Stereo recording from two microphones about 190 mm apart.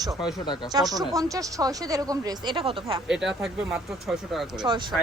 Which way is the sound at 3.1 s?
5° right (ahead or behind).